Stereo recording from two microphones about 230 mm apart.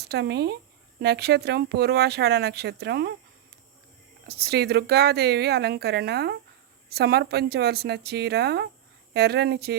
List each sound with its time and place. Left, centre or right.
0.0 s speech: right
4.3 s speech: right